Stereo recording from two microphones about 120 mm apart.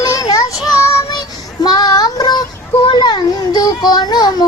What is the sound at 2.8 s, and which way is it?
Music, 40° left (ahead or behind).